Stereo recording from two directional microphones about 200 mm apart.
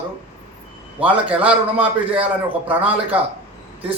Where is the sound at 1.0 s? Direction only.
5° right (ahead or behind).